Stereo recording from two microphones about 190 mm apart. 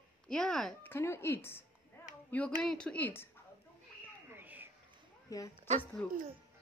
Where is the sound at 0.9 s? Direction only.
15° left (ahead or behind).